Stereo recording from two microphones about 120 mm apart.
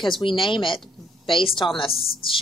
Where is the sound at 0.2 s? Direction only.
45° left (ahead or behind).